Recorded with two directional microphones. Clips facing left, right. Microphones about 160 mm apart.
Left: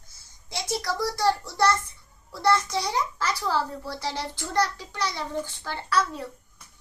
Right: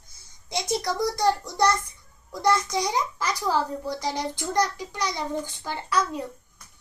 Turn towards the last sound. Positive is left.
turn(degrees=-15)  # may be behind; listen again after turning